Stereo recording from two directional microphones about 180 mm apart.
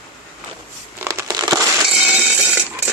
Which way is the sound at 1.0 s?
15° right (ahead or behind).